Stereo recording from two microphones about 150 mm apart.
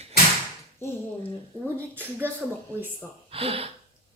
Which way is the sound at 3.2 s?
40° right (ahead or behind).